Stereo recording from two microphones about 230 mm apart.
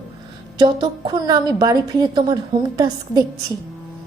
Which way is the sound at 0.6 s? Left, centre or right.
Centre.